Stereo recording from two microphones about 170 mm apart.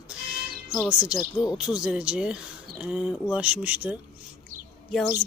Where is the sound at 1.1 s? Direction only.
20° left (ahead or behind).